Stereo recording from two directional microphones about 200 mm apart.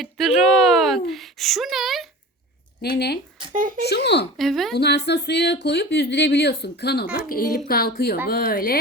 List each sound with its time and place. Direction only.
0.0 s speech: centre (ahead or behind)
2.8 s speech: 55° left (ahead or behind)
3.5 s speech: 40° right (ahead or behind)
3.8 s speech: 55° left (ahead or behind)
4.4 s a woman's voice: centre (ahead or behind)
4.7 s a woman's voice: 55° left (ahead or behind)